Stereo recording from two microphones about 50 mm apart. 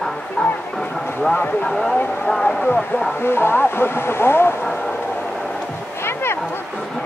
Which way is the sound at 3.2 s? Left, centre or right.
Left.